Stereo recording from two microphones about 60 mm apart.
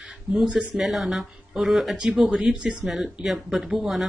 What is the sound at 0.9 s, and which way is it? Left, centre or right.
Speech, centre.